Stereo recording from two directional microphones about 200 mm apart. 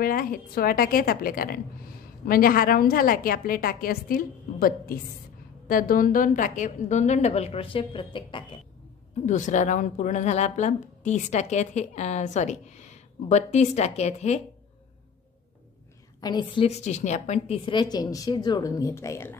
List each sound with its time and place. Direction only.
0.0 s a woman's voice: 45° left (ahead or behind); by 8.5 s 25° left (ahead or behind)
9.2 s speech: 40° left (ahead or behind)
16.2 s a woman's voice: 20° left (ahead or behind)